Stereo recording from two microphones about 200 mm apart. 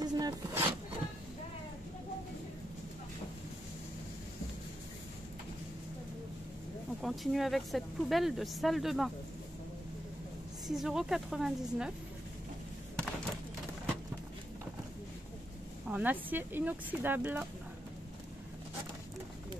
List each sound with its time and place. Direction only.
0.0 s a sound: 20° right (ahead or behind)
7.0 s speech: centre (ahead or behind)
10.7 s speech: centre (ahead or behind)
15.9 s speech: 10° right (ahead or behind)